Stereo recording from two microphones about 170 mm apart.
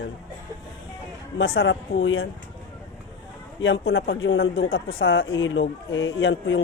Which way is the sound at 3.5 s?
90° left.